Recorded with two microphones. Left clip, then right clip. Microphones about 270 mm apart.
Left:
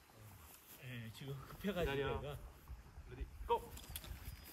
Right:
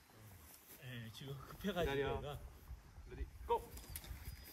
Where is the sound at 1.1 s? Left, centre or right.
Centre.